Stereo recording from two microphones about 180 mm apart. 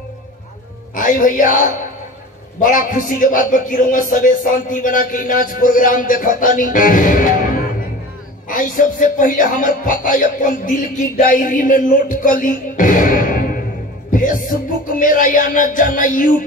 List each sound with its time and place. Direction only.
0.9 s speech: 50° left (ahead or behind)
2.6 s speech: 50° left (ahead or behind)
8.5 s speech: 45° left (ahead or behind)